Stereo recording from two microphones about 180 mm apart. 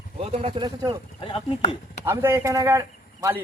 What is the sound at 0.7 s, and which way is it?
Speech, 20° right (ahead or behind).